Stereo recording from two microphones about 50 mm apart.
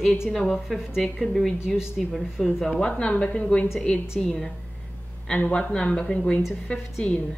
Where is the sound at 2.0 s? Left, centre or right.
Centre.